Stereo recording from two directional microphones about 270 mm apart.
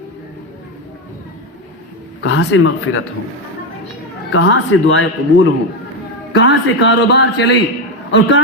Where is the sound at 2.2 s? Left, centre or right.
Left.